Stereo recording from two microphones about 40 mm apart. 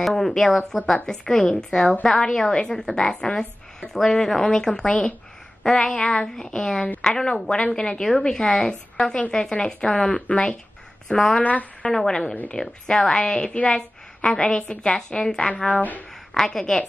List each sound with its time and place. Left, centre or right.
0.0 s speech: centre; by 10.5 s left
11.1 s speech: left
11.8 s a woman's voice: left
15.4 s speech: left
16.3 s speech: centre